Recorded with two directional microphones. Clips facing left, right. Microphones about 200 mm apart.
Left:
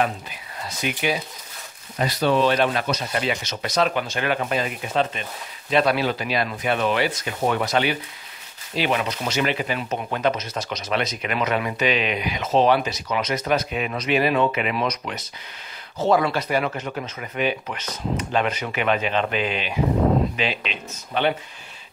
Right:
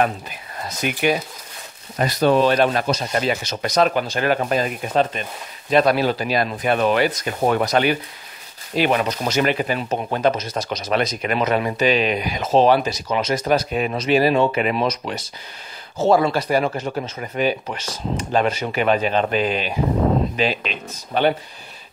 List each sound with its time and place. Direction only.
0.6 s speech: 45° right (ahead or behind)